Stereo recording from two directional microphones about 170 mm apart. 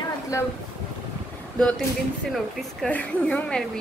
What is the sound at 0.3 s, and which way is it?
Speech, 15° left (ahead or behind).